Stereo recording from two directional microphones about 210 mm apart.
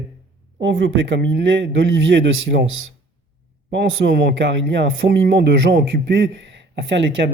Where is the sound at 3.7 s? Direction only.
55° right (ahead or behind).